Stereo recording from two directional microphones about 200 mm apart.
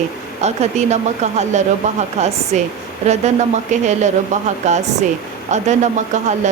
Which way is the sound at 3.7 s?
35° right (ahead or behind).